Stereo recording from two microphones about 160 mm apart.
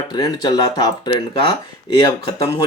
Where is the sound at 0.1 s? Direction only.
25° left (ahead or behind).